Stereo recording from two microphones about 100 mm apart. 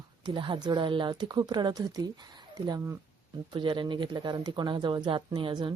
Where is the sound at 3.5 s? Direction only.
55° right (ahead or behind).